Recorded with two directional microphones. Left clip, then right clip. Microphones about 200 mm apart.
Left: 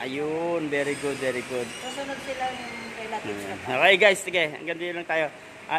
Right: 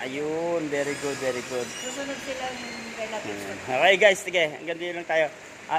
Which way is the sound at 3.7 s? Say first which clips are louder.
Even; 20° left (ahead or behind).